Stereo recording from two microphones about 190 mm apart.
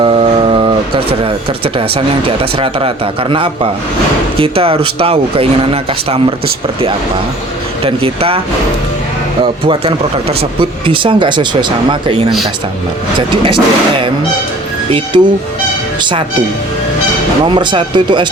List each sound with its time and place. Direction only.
0.0 s a sound: 30° right (ahead or behind)
2.4 s speech: 30° right (ahead or behind)
7.9 s speech: 30° right (ahead or behind)
9.4 s speech: 25° right (ahead or behind)
15.1 s speech: 25° right (ahead or behind)
17.5 s speech: 25° right (ahead or behind)